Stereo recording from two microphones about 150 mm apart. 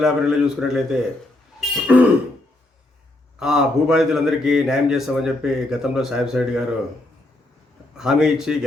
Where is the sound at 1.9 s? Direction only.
10° right (ahead or behind).